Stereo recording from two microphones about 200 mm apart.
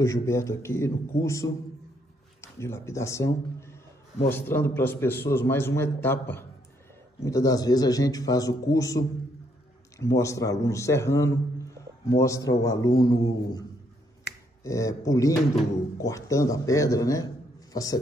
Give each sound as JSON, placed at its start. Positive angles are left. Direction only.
{"t": 0.0, "sound": "a man's voice", "side_deg": 15}
{"t": 14.3, "sound": "finger snapping", "side_deg": 60}
{"t": 14.6, "sound": "a man's voice", "side_deg": 15}